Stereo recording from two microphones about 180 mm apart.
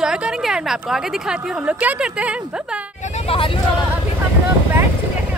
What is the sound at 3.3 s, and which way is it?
Speech, 30° left (ahead or behind).